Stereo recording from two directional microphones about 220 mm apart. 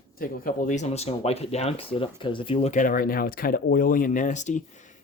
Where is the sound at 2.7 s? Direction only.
40° left (ahead or behind).